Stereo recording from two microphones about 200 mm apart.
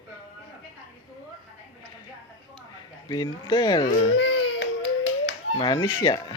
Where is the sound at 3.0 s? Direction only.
20° left (ahead or behind).